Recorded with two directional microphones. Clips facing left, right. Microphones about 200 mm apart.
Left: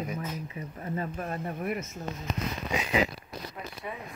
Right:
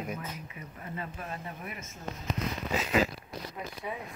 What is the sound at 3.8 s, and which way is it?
Speech, 5° right (ahead or behind).